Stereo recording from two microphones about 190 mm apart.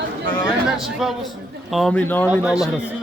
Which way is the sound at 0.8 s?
Centre (ahead or behind).